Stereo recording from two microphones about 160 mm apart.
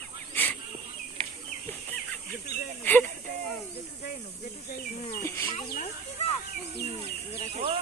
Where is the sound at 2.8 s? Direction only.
10° left (ahead or behind).